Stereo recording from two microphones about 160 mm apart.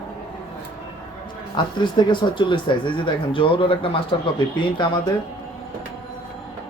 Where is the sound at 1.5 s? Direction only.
30° left (ahead or behind).